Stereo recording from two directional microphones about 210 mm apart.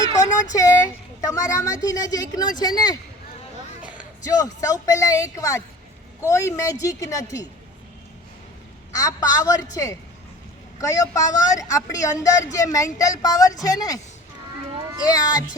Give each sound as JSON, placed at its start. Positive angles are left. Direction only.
{"t": 0.0, "sound": "a sound", "side_deg": 15}
{"t": 1.2, "sound": "a woman's voice", "side_deg": 15}
{"t": 3.8, "sound": "a sound", "side_deg": -5}
{"t": 4.2, "sound": "a woman's voice", "side_deg": 15}
{"t": 8.9, "sound": "a woman's voice", "side_deg": 15}
{"t": 10.8, "sound": "a woman's voice", "side_deg": 15}
{"t": 15.0, "sound": "speech", "side_deg": 20}